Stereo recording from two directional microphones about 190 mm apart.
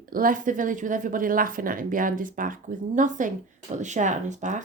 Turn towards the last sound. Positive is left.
turn(degrees=-40)  # may be behind; listen again after turning